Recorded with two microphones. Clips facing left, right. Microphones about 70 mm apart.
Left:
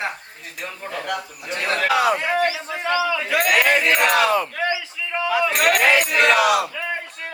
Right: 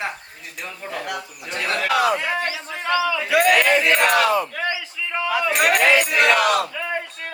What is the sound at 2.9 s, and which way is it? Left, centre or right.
Speech, centre.